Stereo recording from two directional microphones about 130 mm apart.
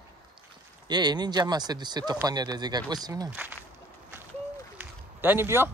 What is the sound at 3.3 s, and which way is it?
Speech, 15° right (ahead or behind).